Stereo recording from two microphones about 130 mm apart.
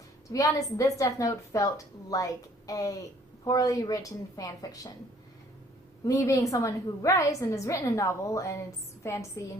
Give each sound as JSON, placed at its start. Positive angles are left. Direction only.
{"t": 0.3, "sound": "a woman's voice", "side_deg": 25}
{"t": 6.1, "sound": "a woman's voice", "side_deg": 25}